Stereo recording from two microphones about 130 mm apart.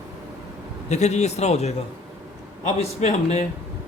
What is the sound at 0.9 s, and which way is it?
A man's voice, 60° left (ahead or behind).